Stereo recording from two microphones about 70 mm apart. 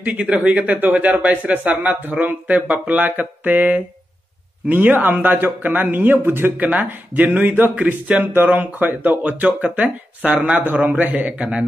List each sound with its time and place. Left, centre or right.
0.0 s speech: centre
6.5 s speech: right